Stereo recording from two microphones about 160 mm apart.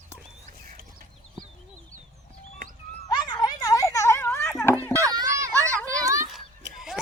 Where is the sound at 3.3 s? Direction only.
25° left (ahead or behind).